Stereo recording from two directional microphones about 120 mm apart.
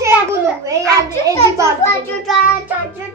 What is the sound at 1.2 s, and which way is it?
Speech, 25° right (ahead or behind).